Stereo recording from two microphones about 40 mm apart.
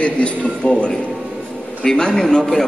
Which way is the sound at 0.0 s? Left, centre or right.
Left.